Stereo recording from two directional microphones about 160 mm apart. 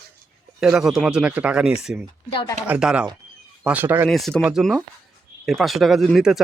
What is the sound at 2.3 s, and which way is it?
Speech, 30° left (ahead or behind).